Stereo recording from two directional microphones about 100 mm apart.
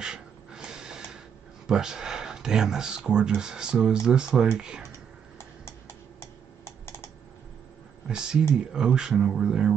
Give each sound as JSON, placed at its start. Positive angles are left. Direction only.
{"t": 0.0, "sound": "gasp", "side_deg": -5}
{"t": 1.7, "sound": "speech", "side_deg": -5}
{"t": 5.4, "sound": "computer keyboard", "side_deg": 25}
{"t": 8.1, "sound": "speech", "side_deg": -5}